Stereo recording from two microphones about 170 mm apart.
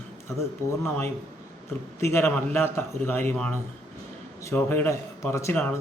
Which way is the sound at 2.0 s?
15° left (ahead or behind).